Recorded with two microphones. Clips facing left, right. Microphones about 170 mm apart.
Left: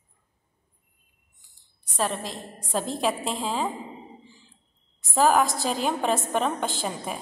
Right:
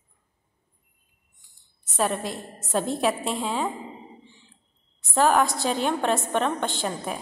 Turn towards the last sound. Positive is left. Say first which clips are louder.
# right 1 dB
turn(degrees=0)  # may be behind; listen again after turning